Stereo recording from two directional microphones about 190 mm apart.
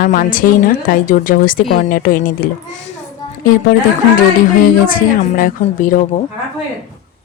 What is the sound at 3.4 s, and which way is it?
Speech, 50° left (ahead or behind).